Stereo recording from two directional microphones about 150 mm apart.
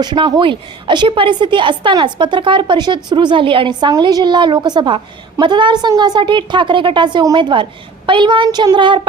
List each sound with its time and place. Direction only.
0.0 s a woman's voice: 30° right (ahead or behind)